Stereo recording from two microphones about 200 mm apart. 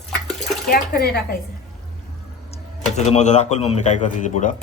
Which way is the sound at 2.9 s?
35° left (ahead or behind).